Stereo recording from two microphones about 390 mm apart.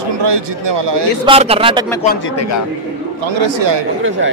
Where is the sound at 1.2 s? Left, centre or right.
Centre.